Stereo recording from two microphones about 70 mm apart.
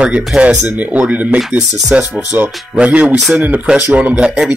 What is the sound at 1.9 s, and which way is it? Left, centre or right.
Speech, centre.